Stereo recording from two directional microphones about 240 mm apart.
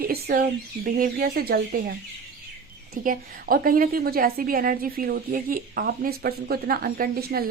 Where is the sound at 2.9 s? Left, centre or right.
Right.